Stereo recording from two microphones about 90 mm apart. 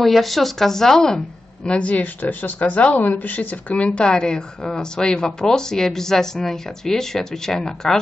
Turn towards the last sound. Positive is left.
turn(degrees=5)  # may be behind; listen again after turning